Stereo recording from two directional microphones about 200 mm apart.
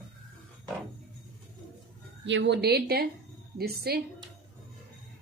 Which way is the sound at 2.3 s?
60° right (ahead or behind).